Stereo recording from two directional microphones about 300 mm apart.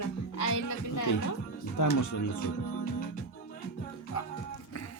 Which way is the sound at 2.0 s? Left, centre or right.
Left.